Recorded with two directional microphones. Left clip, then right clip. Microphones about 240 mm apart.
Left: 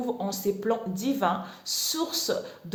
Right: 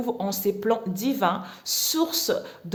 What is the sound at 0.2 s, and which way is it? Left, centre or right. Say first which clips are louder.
Speech: right 3 dB; right.